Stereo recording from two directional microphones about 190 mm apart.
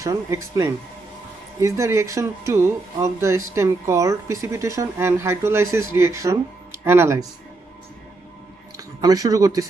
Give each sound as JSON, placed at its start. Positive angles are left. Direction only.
{"t": 0.0, "sound": "speech", "side_deg": -15}
{"t": 9.0, "sound": "speech", "side_deg": -20}